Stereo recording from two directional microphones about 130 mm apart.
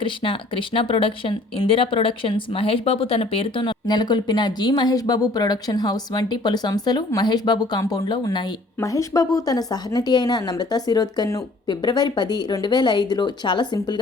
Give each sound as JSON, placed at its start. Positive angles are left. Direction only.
{"t": 0.0, "sound": "speech", "side_deg": 40}
{"t": 8.8, "sound": "a woman's voice", "side_deg": 25}